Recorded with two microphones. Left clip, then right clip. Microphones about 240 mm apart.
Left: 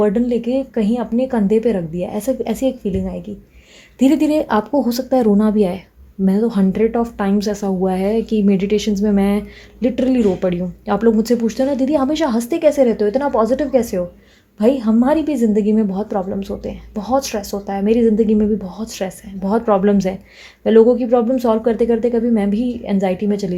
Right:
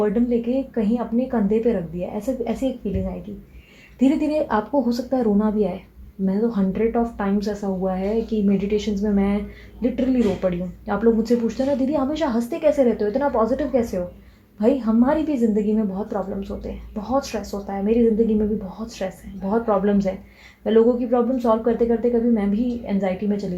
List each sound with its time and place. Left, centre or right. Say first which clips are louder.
0.0 s speech: left 4 dB; left
3.9 s speech: left 5 dB; left